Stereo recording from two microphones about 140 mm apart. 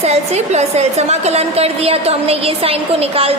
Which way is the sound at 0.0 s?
50° right (ahead or behind).